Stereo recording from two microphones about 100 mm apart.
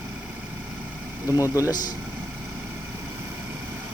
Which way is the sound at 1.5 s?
40° left (ahead or behind).